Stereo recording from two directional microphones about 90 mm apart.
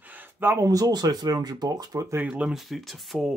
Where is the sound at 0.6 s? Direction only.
40° right (ahead or behind).